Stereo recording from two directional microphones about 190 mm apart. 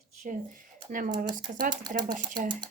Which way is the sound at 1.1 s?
20° right (ahead or behind).